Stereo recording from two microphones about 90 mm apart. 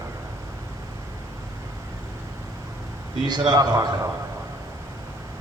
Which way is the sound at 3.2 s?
55° right (ahead or behind).